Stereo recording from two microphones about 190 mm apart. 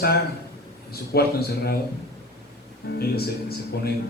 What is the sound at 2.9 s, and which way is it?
Speech, 55° left (ahead or behind).